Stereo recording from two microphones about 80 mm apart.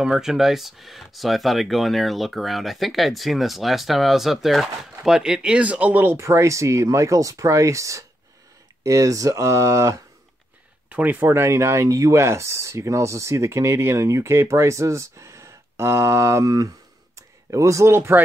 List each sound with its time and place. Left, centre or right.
0.0 s speech: centre; by 6.2 s right
6.2 s speech: right
10.9 s speech: right